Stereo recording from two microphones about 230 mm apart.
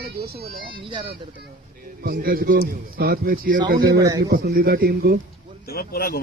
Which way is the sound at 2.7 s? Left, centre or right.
Right.